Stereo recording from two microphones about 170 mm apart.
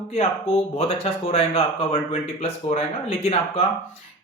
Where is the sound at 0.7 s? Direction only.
40° left (ahead or behind).